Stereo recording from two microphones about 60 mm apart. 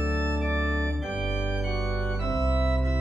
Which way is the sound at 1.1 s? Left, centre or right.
Right.